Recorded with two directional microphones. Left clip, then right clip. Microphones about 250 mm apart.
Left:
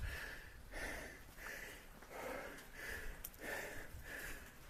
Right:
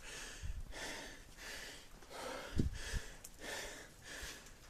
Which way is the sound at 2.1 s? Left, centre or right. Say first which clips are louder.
Right 1 dB; centre.